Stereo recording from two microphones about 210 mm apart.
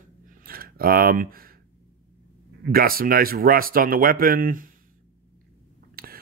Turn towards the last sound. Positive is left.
turn(degrees=-45)  # may be behind; listen again after turning